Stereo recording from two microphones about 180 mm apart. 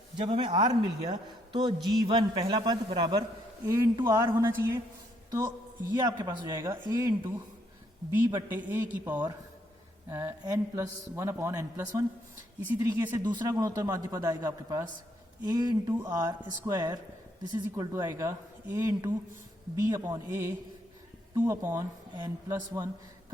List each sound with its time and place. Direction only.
0.3 s a man's voice: 25° right (ahead or behind)
8.4 s a man's voice: 10° right (ahead or behind)